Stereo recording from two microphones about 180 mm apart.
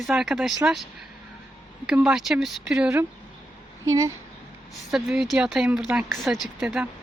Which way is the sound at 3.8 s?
15° right (ahead or behind).